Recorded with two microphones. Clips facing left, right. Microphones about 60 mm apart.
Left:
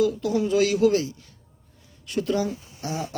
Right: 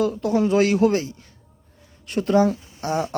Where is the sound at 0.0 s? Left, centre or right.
Right.